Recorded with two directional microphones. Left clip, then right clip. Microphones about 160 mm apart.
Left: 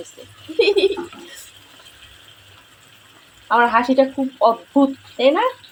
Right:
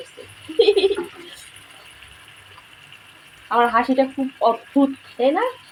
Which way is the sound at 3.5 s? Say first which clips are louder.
Left 2 dB; 15° left (ahead or behind).